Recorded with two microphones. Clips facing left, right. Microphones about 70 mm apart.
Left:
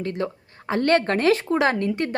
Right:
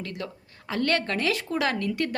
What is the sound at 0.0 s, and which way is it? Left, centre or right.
A woman's voice, left.